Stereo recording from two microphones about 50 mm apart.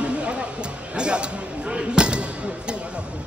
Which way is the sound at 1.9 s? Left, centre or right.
Centre.